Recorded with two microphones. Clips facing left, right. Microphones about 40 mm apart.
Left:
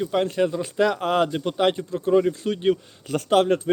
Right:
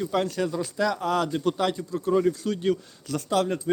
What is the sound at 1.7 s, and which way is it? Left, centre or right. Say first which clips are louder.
A man's voice: left 5 dB; left.